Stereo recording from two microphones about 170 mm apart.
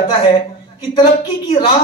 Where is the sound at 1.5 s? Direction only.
35° left (ahead or behind).